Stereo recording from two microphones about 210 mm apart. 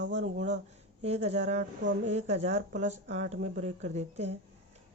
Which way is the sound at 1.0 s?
30° right (ahead or behind).